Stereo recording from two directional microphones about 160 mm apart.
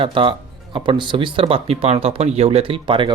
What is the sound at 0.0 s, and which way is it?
Speech, 35° right (ahead or behind).